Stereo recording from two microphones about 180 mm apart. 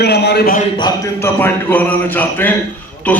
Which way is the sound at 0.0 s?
65° left (ahead or behind).